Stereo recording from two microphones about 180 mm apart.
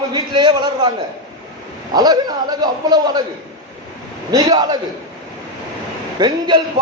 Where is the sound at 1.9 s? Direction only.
20° right (ahead or behind).